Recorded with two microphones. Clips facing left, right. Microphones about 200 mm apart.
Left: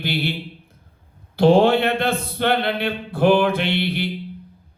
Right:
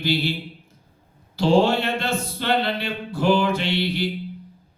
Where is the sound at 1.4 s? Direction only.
55° left (ahead or behind).